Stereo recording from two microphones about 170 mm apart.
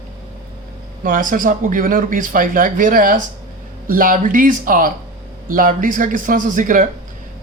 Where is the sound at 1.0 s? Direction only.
55° right (ahead or behind).